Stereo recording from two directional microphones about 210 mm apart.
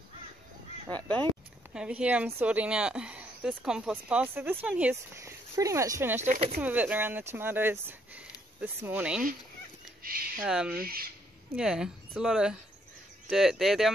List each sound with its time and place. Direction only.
0.8 s speech: 5° left (ahead or behind)
1.7 s a woman's voice: 5° right (ahead or behind)
6.2 s speech: 40° right (ahead or behind)
6.6 s a woman's voice: 5° right (ahead or behind)
10.0 s a sound: 45° right (ahead or behind)
10.4 s speech: 5° right (ahead or behind)
10.8 s speech: 45° right (ahead or behind)
11.5 s speech: 5° right (ahead or behind)